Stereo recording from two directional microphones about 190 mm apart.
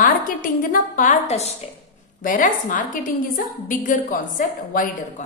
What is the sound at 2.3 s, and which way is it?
A woman's voice, 45° left (ahead or behind).